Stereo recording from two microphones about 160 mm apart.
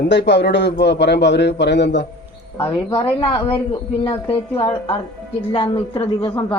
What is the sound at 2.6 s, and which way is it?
Speech, 35° left (ahead or behind).